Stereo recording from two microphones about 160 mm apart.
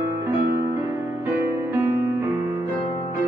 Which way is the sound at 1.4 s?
15° right (ahead or behind).